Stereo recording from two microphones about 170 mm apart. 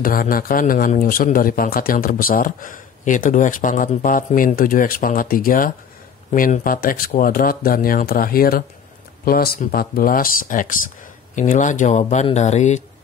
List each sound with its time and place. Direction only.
0.0 s a man's voice: 55° left (ahead or behind)